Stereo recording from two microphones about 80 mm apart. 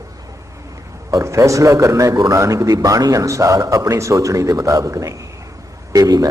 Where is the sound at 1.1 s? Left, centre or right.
Right.